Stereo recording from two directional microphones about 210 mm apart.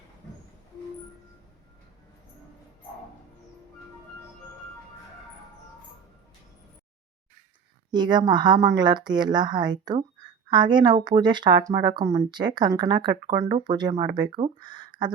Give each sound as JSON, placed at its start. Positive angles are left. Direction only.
{"t": 7.9, "sound": "speech", "side_deg": -20}